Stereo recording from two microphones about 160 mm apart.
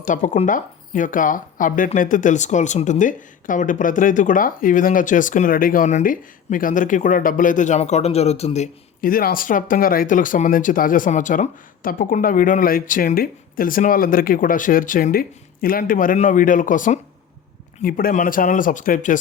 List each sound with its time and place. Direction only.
0.0 s speech: 55° left (ahead or behind)
9.0 s speech: 65° left (ahead or behind)